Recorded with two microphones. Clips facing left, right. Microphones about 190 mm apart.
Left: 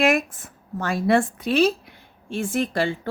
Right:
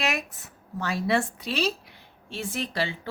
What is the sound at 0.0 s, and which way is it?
Speech, 50° left (ahead or behind).